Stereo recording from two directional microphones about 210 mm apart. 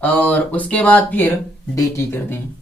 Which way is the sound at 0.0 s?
5° left (ahead or behind).